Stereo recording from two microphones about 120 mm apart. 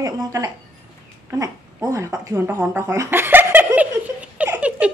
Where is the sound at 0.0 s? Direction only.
30° right (ahead or behind).